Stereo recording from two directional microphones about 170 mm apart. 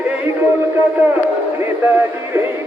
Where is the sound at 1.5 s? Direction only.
10° right (ahead or behind).